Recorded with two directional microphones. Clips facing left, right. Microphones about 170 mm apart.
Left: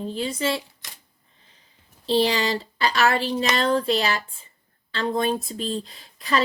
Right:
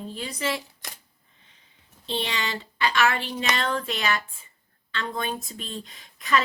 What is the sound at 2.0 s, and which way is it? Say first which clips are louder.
Speech: left 9 dB; 35° left (ahead or behind).